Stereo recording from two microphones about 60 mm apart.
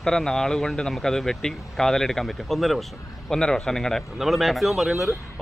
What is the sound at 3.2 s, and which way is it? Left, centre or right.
Speech, centre.